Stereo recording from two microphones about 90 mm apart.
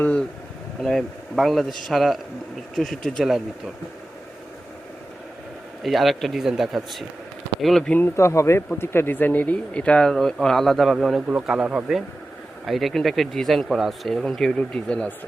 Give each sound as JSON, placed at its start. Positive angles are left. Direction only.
{"t": 0.0, "sound": "speech", "side_deg": 15}
{"t": 0.8, "sound": "speech", "side_deg": 0}
{"t": 5.8, "sound": "speech", "side_deg": 0}
{"t": 7.9, "sound": "speech", "side_deg": 30}
{"t": 11.3, "sound": "speech", "side_deg": -10}
{"t": 12.6, "sound": "speech", "side_deg": 0}